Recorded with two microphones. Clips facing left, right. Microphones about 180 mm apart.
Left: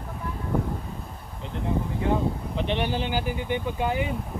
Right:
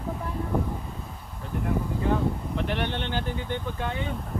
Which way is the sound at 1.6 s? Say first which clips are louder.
Left 1 dB; 20° left (ahead or behind).